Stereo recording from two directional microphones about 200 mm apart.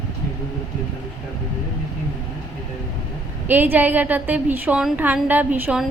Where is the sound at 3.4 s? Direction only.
10° right (ahead or behind).